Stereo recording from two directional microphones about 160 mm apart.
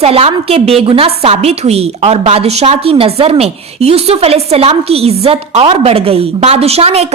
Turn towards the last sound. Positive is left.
turn(degrees=-40)  # may be behind; listen again after turning